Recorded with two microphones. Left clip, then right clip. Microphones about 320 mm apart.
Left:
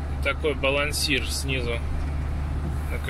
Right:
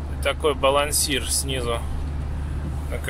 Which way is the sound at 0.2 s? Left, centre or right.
Right.